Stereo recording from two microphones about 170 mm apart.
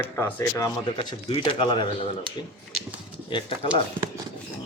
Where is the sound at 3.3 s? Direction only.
30° left (ahead or behind).